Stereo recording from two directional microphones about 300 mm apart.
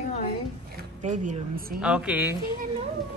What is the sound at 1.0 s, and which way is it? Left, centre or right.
Speech, right.